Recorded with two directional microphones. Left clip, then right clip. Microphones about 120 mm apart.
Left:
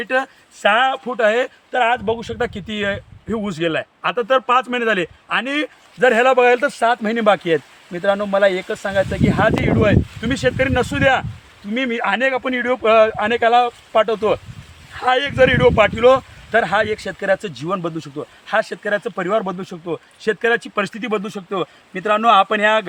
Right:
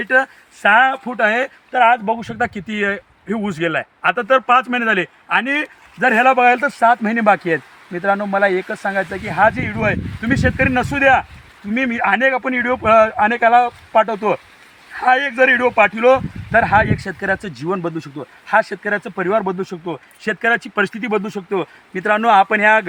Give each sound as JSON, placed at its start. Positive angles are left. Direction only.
{"t": 0.0, "sound": "speech", "side_deg": 10}
{"t": 4.8, "sound": "speech", "side_deg": 15}
{"t": 20.2, "sound": "speech", "side_deg": 5}